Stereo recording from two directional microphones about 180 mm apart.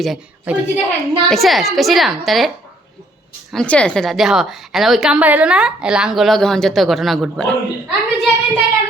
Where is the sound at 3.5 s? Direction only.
5° left (ahead or behind).